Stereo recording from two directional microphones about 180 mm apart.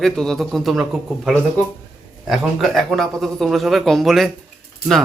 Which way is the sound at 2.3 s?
Centre (ahead or behind).